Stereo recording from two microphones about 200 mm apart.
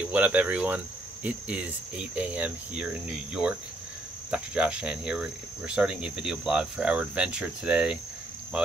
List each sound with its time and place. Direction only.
0.0 s cricket: 5° right (ahead or behind)